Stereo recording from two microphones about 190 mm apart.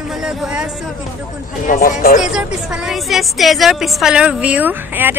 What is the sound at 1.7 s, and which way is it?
Speech, 45° left (ahead or behind).